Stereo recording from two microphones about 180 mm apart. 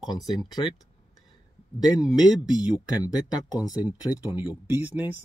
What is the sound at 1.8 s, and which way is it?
Speech, 20° left (ahead or behind).